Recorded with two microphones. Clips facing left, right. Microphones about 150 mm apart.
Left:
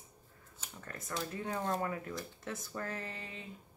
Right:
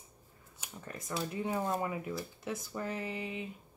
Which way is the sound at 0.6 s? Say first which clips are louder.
Right 2 dB; 15° right (ahead or behind).